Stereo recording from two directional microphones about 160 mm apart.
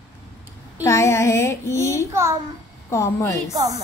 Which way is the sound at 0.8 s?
20° left (ahead or behind).